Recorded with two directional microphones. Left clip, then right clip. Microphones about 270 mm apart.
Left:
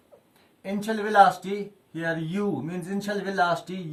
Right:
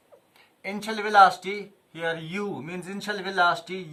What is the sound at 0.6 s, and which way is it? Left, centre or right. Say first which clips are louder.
Speech: left 1 dB; centre.